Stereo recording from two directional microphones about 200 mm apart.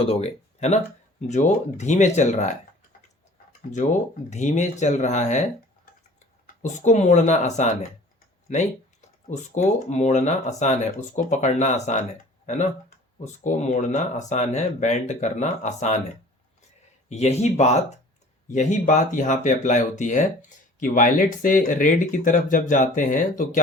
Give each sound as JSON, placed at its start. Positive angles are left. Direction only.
{"t": 0.0, "sound": "speech", "side_deg": 30}
{"t": 4.3, "sound": "speech", "side_deg": 35}
{"t": 13.4, "sound": "speech", "side_deg": 35}
{"t": 17.1, "sound": "speech", "side_deg": 35}